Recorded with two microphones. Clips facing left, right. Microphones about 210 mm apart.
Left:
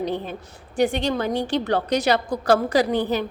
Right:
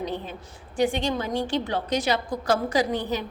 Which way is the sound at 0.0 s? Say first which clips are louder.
Left 5 dB; 60° left (ahead or behind).